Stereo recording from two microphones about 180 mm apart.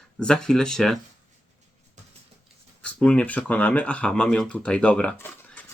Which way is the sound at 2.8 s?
5° left (ahead or behind).